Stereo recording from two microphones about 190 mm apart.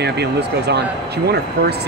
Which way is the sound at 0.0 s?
60° right (ahead or behind).